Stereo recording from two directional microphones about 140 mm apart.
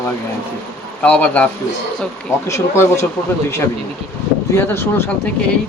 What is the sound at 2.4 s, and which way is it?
Speech, 20° left (ahead or behind).